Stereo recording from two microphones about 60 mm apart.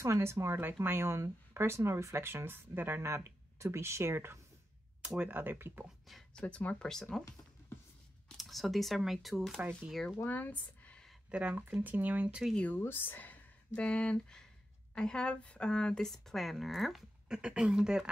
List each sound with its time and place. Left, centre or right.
0.0 s speech: right
5.0 s speech: centre
5.3 s speech: right
6.3 s speech: left
6.9 s speech: centre
8.4 s speech: centre
10.2 s speech: left
11.2 s speech: centre
11.5 s speech: right
12.7 s speech: left; by 17.0 s centre
17.3 s speech: centre